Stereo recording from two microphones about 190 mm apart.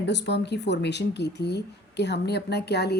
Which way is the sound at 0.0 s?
65° left (ahead or behind).